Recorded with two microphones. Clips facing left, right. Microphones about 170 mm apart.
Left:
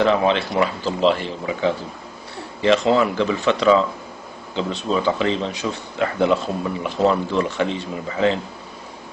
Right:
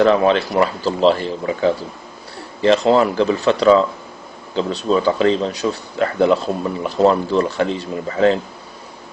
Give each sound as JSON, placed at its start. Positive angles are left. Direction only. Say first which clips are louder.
{"t": 0.0, "sound": "speech", "louder": "right 4 dB", "side_deg": -40}